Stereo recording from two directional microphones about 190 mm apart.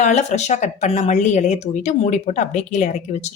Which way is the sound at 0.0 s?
35° left (ahead or behind).